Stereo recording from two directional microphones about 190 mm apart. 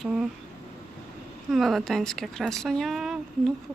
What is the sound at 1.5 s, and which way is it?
Speech, centre (ahead or behind).